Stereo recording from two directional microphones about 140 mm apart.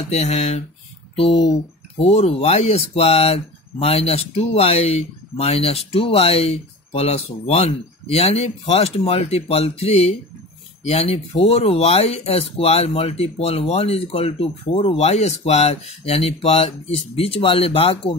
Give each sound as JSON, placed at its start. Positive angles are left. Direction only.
{"t": 0.1, "sound": "speech", "side_deg": 50}